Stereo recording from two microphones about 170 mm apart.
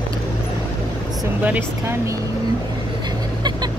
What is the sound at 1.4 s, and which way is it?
Speech, 10° right (ahead or behind).